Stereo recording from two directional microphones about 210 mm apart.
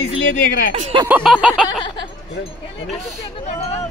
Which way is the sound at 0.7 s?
30° right (ahead or behind).